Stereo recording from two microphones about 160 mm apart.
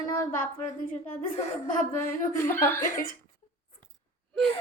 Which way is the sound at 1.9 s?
15° left (ahead or behind).